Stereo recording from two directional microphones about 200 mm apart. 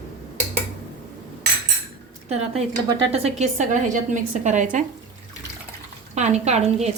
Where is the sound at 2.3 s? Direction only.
30° right (ahead or behind).